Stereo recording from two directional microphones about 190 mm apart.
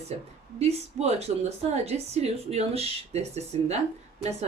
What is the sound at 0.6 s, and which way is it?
A woman's voice, 35° right (ahead or behind).